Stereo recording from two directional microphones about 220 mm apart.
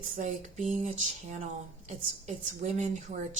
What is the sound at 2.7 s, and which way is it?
Speech, 30° right (ahead or behind).